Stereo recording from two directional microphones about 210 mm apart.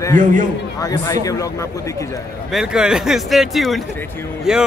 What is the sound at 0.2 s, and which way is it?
Speech, 40° right (ahead or behind).